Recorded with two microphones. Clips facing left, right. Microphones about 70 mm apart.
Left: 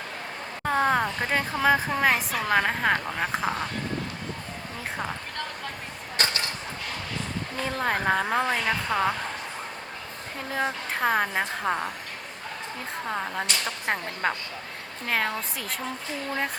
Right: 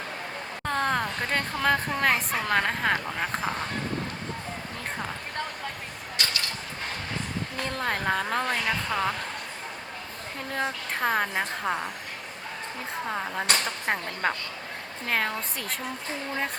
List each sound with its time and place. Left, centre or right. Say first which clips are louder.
0.6 s a woman's voice: left 4 dB; centre
6.2 s a sound: left 3 dB; left
7.5 s a woman's voice: left 3 dB; centre
10.9 s a woman's voice: left 1 dB; centre
13.1 s a woman's voice: right 1 dB; centre